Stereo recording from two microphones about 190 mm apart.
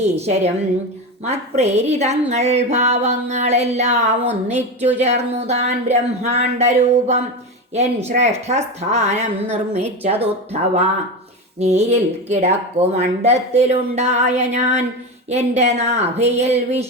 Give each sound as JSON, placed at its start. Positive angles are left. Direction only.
{"t": 0.0, "sound": "a woman's voice", "side_deg": -35}
{"t": 11.6, "sound": "a woman's voice", "side_deg": -35}